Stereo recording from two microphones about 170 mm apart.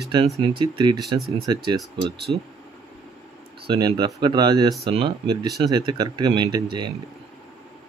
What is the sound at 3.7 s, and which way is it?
Speech, 25° right (ahead or behind).